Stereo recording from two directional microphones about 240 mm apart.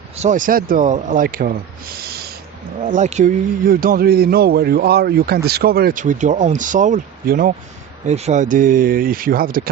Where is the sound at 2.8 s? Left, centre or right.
Right.